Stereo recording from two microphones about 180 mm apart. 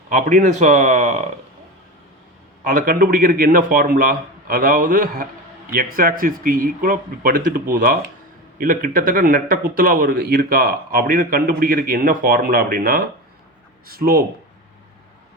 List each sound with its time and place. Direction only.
0.1 s speech: 45° right (ahead or behind)
2.6 s a man's voice: 50° right (ahead or behind)